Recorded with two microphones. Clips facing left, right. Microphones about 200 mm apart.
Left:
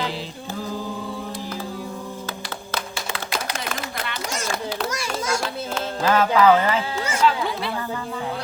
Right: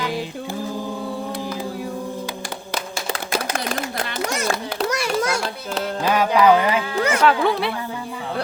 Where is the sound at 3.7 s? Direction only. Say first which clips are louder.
Right 4 dB; 35° right (ahead or behind).